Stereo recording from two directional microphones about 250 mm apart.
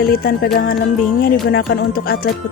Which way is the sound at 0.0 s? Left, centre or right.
Left.